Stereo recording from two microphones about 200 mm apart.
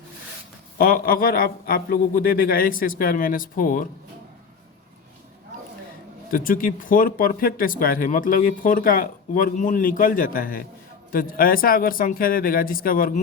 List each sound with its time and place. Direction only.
0.8 s speech: 45° left (ahead or behind)
6.3 s speech: 45° left (ahead or behind)